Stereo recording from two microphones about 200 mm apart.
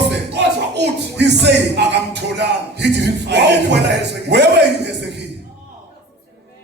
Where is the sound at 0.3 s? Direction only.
55° right (ahead or behind).